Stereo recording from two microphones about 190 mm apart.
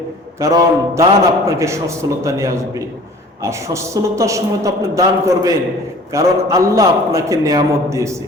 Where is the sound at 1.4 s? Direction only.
15° right (ahead or behind).